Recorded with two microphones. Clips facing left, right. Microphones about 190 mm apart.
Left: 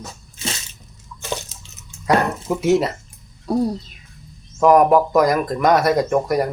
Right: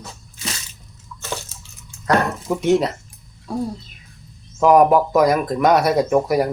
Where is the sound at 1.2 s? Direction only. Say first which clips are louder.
Left 2 dB; 15° left (ahead or behind).